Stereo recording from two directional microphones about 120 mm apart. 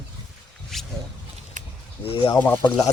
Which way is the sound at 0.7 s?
5° left (ahead or behind).